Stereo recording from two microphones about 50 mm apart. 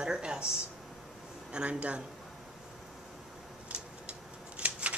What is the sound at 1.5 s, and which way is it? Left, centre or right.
Speech, right.